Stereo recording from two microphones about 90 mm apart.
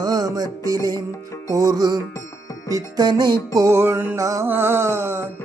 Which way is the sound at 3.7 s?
25° right (ahead or behind).